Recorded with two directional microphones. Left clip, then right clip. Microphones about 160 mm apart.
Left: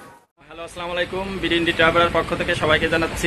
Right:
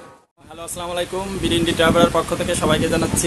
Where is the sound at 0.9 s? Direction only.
20° right (ahead or behind).